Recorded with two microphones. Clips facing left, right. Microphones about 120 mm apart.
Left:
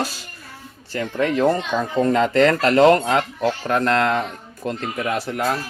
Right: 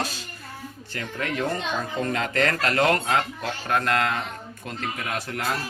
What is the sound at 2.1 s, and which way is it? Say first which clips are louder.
Speech: left 9 dB; 35° left (ahead or behind).